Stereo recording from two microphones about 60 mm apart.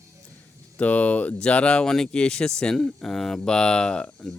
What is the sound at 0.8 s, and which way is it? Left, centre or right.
Speech, left.